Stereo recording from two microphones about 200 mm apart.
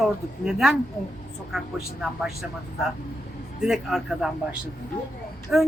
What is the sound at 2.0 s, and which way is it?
Speech, centre (ahead or behind).